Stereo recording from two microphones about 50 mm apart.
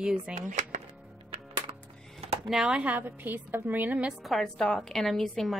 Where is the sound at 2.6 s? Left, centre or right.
Right.